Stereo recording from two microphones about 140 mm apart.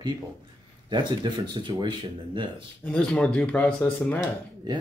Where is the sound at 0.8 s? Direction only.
30° right (ahead or behind).